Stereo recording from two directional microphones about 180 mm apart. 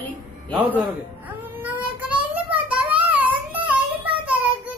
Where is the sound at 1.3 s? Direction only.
10° right (ahead or behind).